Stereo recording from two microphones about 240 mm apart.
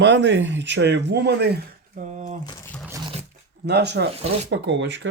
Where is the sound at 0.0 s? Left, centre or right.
Right.